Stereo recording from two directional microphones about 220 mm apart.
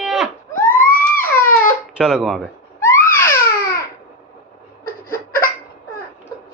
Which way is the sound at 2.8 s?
10° left (ahead or behind).